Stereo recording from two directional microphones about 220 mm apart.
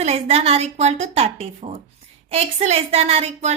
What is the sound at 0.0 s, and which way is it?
A woman's voice, 30° right (ahead or behind).